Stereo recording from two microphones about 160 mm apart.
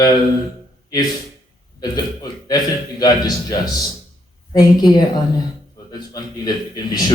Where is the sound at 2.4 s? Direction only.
25° left (ahead or behind).